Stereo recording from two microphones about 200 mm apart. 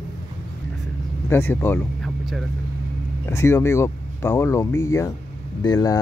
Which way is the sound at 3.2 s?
15° left (ahead or behind).